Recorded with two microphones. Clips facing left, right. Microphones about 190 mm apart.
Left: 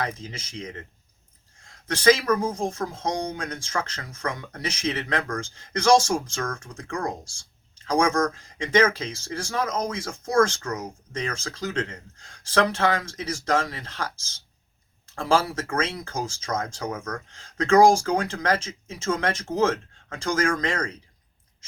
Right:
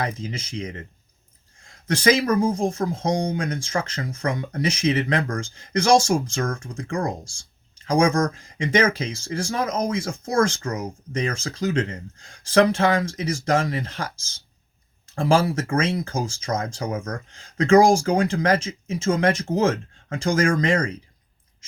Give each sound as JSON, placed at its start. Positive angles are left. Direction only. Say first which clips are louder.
{"t": 0.0, "sound": "speech", "louder": "right 3 dB", "side_deg": -15}
{"t": 2.0, "sound": "speech", "louder": "right 1 dB", "side_deg": -15}
{"t": 6.4, "sound": "speech", "louder": "right 4 dB", "side_deg": -30}
{"t": 7.9, "sound": "speech", "louder": "right 3 dB", "side_deg": -10}